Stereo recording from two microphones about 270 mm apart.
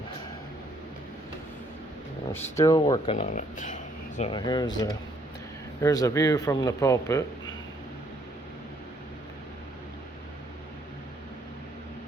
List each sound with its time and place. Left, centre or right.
2.3 s speech: centre; by 3.8 s left
4.2 s speech: centre